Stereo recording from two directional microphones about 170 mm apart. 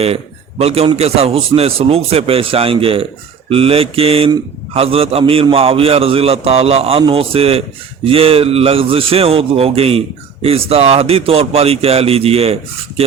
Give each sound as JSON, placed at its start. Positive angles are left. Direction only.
{"t": 0.6, "sound": "a man's voice", "side_deg": -35}